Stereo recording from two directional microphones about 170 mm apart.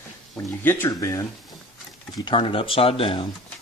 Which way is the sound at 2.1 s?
30° left (ahead or behind).